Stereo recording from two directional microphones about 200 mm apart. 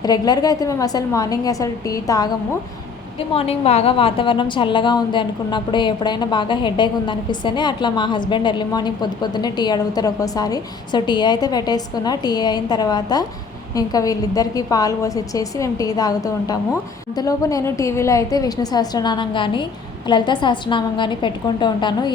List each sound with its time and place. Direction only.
0.0 s a woman's voice: 20° left (ahead or behind)
3.3 s a woman's voice: 30° left (ahead or behind)